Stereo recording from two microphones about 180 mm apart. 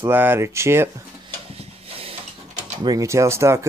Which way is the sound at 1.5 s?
35° right (ahead or behind).